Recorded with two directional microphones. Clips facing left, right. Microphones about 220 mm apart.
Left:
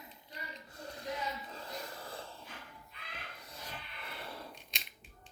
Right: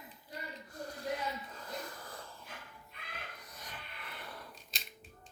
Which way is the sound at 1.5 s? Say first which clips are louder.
Even; 25° left (ahead or behind).